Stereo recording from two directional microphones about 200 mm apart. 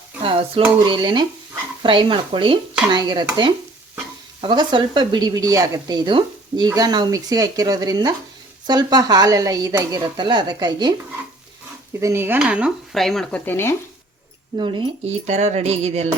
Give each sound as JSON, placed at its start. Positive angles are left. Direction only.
{"t": 0.2, "sound": "a sound", "side_deg": -25}
{"t": 0.9, "sound": "speech", "side_deg": -20}
{"t": 4.4, "sound": "speech", "side_deg": -25}
{"t": 11.9, "sound": "speech", "side_deg": -15}
{"t": 14.5, "sound": "speech", "side_deg": -25}